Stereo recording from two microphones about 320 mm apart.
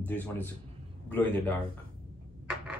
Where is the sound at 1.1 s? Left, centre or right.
Centre.